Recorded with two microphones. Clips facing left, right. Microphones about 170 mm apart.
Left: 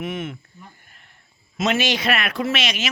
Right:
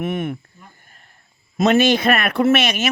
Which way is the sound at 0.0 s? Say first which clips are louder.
Right 5 dB; 50° right (ahead or behind).